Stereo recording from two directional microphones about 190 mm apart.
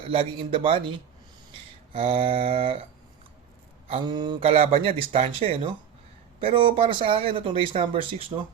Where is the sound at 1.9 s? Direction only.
30° right (ahead or behind).